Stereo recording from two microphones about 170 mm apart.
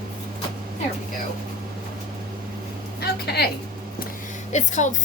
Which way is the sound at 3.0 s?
70° left (ahead or behind).